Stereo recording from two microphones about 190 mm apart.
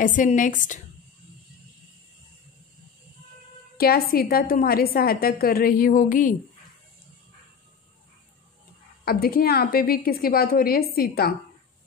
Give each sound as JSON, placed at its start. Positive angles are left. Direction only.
{"t": 0.0, "sound": "a woman's voice", "side_deg": 45}
{"t": 3.7, "sound": "a woman's voice", "side_deg": 55}
{"t": 9.0, "sound": "a woman's voice", "side_deg": 50}